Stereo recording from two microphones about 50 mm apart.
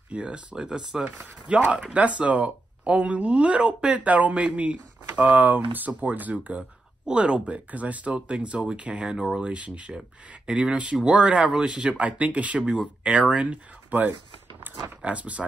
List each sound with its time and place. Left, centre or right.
0.1 s speech: right